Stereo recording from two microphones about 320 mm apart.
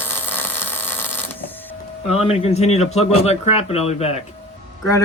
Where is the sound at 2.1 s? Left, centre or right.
Centre.